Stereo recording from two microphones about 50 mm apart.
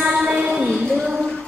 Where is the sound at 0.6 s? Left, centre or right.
Centre.